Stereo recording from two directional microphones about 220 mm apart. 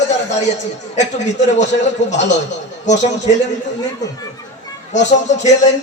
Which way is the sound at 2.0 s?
55° left (ahead or behind).